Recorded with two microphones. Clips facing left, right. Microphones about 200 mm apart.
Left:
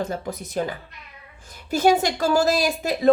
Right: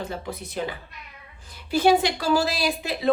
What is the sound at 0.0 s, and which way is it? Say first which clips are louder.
A woman's voice: left 4 dB; 45° left (ahead or behind).